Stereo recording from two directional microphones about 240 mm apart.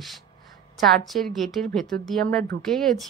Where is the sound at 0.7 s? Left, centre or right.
Centre.